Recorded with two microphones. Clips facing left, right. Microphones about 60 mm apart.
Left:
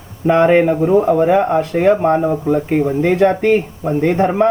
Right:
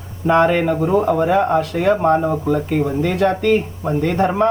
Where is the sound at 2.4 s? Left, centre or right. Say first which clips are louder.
Left 3 dB; left.